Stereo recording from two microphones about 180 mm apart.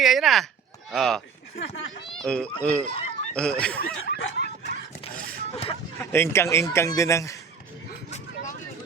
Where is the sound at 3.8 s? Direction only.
65° left (ahead or behind).